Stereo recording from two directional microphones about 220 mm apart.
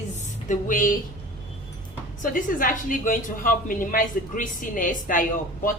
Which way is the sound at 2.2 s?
40° left (ahead or behind).